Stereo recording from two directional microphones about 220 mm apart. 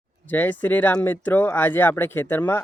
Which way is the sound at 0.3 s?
10° left (ahead or behind).